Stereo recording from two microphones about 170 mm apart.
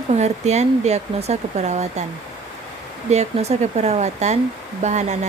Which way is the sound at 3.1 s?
40° right (ahead or behind).